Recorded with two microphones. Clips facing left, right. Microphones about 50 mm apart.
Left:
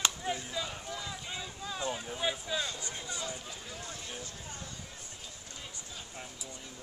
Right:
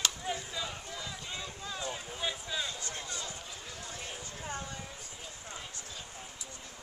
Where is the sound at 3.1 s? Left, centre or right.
Centre.